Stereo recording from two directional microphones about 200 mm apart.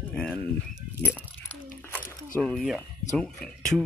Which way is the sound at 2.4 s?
Centre (ahead or behind).